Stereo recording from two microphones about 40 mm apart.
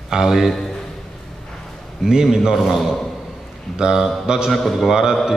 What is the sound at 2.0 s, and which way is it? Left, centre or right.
Speech, centre.